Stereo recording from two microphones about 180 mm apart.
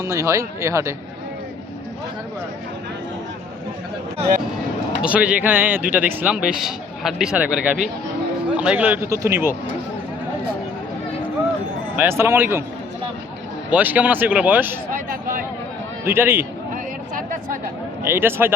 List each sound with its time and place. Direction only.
0.0 s a man's voice: 20° right (ahead or behind)
5.0 s a man's voice: 5° right (ahead or behind)
11.9 s a man's voice: 15° right (ahead or behind)
13.7 s a man's voice: 10° right (ahead or behind)
16.0 s a man's voice: 10° right (ahead or behind)
18.0 s a man's voice: 10° right (ahead or behind)